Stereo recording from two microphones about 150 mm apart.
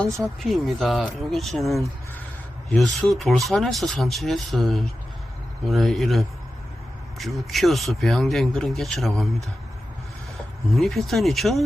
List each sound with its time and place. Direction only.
0.0 s speech: centre (ahead or behind)
10.8 s speech: centre (ahead or behind)